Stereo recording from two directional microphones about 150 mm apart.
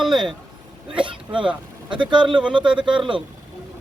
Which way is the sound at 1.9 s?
35° right (ahead or behind).